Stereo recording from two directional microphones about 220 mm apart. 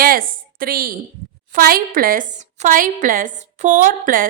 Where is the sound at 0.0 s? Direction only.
40° right (ahead or behind).